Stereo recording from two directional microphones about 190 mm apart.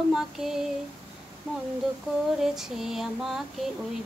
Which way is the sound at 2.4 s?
Centre (ahead or behind).